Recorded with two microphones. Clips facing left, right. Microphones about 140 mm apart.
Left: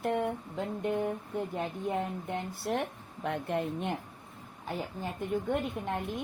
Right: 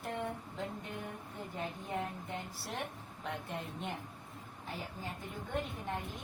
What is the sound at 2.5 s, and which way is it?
A woman's voice, 55° left (ahead or behind).